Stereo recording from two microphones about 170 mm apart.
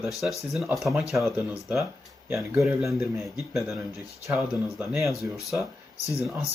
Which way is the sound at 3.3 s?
Centre (ahead or behind).